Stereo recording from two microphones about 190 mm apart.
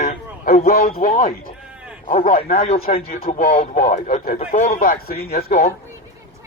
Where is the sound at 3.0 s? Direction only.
55° left (ahead or behind).